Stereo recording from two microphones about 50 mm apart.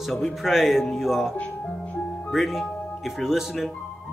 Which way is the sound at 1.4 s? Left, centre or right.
Left.